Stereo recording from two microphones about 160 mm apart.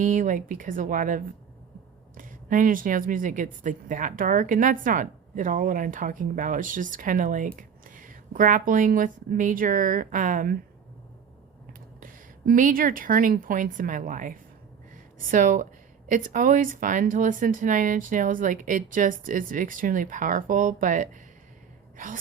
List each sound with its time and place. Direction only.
0.0 s a woman's voice: 55° right (ahead or behind)
11.9 s a woman's voice: 60° right (ahead or behind)